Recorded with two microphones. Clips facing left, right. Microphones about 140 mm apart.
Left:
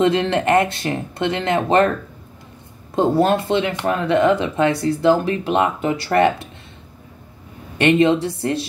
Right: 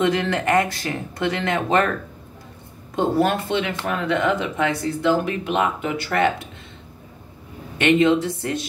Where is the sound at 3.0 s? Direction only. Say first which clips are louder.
Left 3 dB; 30° left (ahead or behind).